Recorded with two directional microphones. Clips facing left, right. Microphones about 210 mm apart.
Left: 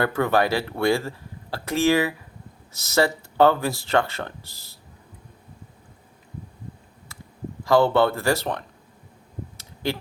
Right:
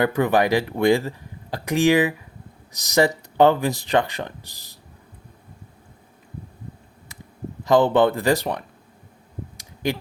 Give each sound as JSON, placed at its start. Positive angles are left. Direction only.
{"t": 0.0, "sound": "speech", "side_deg": -15}
{"t": 7.6, "sound": "speech", "side_deg": -20}
{"t": 9.6, "sound": "a sound", "side_deg": -15}